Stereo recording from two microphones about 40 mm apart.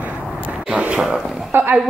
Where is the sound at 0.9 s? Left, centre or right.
Right.